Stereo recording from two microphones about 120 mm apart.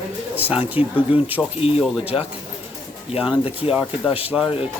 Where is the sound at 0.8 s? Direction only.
55° left (ahead or behind).